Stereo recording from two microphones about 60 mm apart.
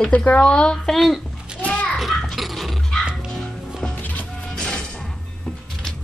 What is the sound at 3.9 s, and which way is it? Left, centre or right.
Music, left.